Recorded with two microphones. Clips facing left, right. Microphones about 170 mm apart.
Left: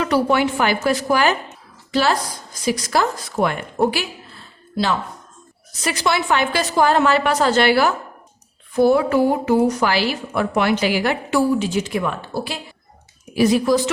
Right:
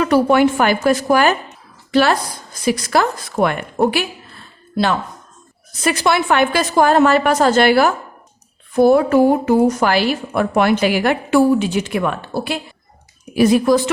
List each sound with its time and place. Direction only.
0.0 s a woman's voice: 50° right (ahead or behind)
1.9 s a woman's voice: 60° right (ahead or behind)
5.8 s a woman's voice: 55° right (ahead or behind)